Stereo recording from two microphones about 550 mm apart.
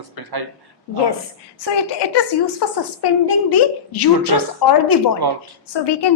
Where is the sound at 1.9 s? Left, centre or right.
Left.